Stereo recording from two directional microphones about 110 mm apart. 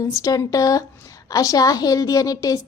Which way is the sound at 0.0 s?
30° left (ahead or behind).